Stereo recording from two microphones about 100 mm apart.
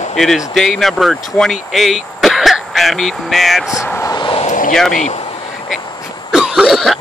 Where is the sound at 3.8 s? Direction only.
20° left (ahead or behind).